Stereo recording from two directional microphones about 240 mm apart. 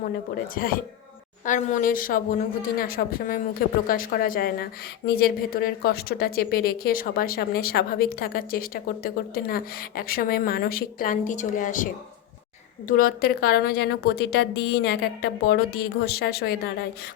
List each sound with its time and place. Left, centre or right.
0.5 s a woman's voice: left
12.9 s a woman's voice: left